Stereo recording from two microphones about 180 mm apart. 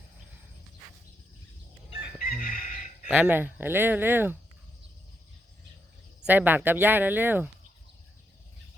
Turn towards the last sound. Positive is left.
turn(degrees=-10)  # may be behind; listen again after turning